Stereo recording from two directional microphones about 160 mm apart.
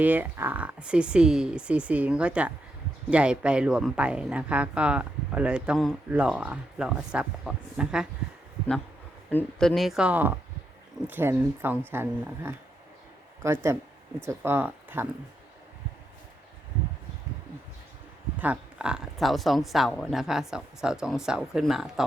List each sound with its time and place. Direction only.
0.0 s speech: 10° right (ahead or behind)
9.3 s speech: 5° left (ahead or behind); by 15.0 s 10° right (ahead or behind)
18.3 s speech: 10° right (ahead or behind)